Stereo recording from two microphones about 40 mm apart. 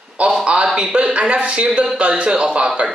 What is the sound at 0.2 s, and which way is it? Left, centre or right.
A man's voice, right.